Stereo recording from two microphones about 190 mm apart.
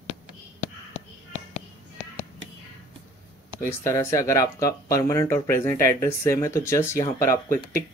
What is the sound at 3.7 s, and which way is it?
Speech, 15° left (ahead or behind).